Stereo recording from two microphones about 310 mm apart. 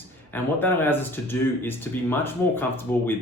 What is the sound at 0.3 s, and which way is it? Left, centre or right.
Speech, centre.